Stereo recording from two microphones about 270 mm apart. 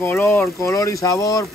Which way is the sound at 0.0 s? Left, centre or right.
Centre.